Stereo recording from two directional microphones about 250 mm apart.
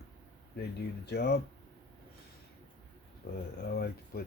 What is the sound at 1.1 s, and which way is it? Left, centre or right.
Speech, left.